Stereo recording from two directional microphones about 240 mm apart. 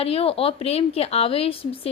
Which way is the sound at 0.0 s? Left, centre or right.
Left.